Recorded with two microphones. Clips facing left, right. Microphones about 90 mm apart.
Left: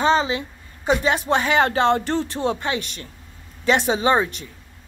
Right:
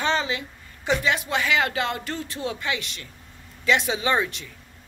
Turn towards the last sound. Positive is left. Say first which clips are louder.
# left 5 dB
turn(degrees=30)  # may be behind; listen again after turning